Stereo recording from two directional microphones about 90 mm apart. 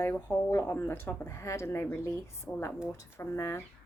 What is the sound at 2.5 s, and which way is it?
Speech, 15° left (ahead or behind).